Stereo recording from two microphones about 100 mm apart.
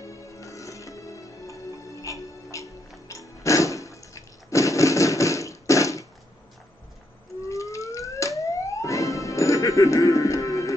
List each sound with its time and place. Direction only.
0.0 s music: 30° left (ahead or behind)
3.1 s toilet flush: 30° left (ahead or behind)
7.4 s siren: 30° left (ahead or behind)